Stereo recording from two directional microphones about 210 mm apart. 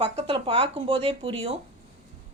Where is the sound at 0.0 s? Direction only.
25° right (ahead or behind).